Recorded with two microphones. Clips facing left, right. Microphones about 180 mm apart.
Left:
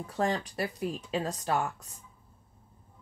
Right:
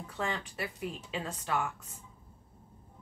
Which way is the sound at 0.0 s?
40° left (ahead or behind).